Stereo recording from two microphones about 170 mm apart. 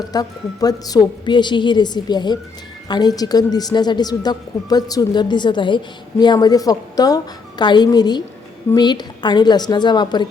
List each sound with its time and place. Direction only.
0.0 s a woman's voice: 20° left (ahead or behind)